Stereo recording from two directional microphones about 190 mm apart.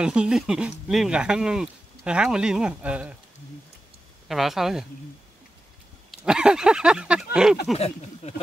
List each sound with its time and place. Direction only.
0.0 s speech: 5° right (ahead or behind)
4.3 s speech: centre (ahead or behind)
6.1 s speech: 5° right (ahead or behind)
7.7 s speech: 35° left (ahead or behind)